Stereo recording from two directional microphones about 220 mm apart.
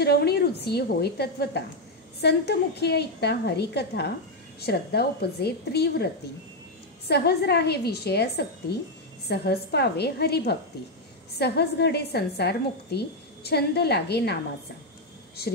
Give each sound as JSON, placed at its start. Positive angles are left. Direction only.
{"t": 0.0, "sound": "a woman's voice", "side_deg": 45}
{"t": 7.1, "sound": "a woman's voice", "side_deg": 45}